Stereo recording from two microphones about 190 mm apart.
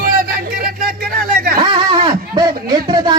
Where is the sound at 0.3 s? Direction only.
50° right (ahead or behind).